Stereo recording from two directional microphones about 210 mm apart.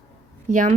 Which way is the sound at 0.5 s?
40° right (ahead or behind).